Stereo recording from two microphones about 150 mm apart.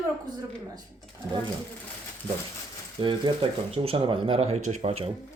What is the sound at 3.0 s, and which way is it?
Speech, 35° right (ahead or behind).